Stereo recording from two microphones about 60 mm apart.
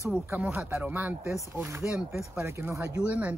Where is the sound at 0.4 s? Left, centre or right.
Right.